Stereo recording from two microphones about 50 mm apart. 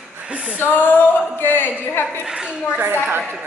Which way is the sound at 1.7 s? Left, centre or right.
Left.